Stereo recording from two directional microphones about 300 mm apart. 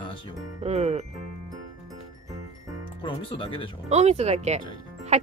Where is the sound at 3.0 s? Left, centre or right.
Centre.